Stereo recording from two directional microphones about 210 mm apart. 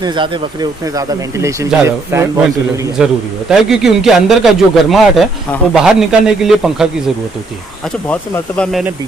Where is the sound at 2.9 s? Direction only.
5° right (ahead or behind).